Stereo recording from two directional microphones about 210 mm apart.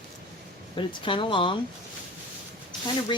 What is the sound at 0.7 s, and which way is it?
Speech, 25° left (ahead or behind).